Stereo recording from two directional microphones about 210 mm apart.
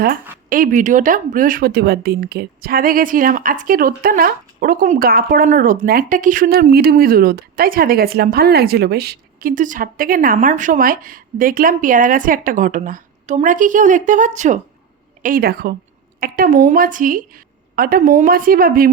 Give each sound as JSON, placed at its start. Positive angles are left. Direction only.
{"t": 0.0, "sound": "a woman's voice", "side_deg": -45}